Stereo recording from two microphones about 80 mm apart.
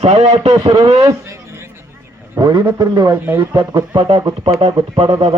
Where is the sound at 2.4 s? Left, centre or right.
Right.